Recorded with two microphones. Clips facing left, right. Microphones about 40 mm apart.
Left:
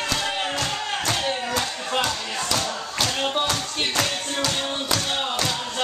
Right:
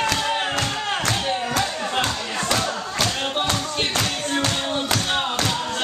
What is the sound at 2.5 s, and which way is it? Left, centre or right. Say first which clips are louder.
Crowd: right 2 dB; right.